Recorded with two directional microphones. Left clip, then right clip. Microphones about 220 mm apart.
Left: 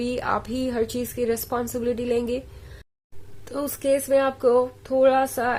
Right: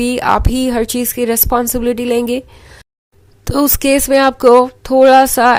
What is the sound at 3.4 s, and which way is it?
Speech, 40° right (ahead or behind).